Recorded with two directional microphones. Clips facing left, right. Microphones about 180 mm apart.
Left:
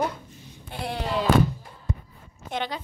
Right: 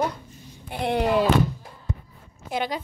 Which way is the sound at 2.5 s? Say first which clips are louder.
Right 3 dB; 10° right (ahead or behind).